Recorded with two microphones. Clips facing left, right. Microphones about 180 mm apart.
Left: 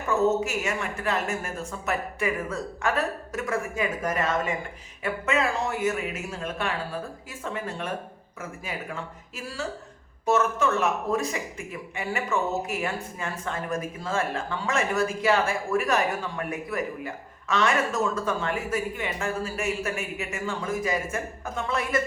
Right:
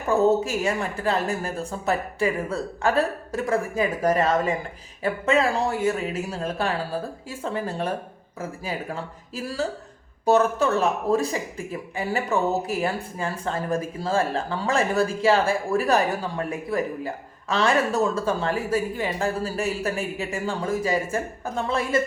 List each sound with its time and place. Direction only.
0.1 s a man's voice: 35° right (ahead or behind)